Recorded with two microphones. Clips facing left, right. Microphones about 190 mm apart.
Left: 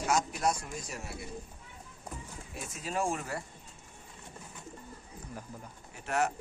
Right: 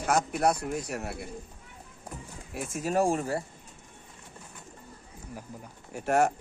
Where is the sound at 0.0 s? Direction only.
55° right (ahead or behind).